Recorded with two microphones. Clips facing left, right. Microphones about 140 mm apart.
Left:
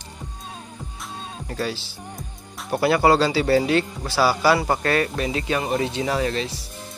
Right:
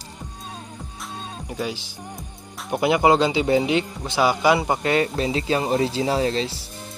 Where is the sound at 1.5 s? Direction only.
15° right (ahead or behind).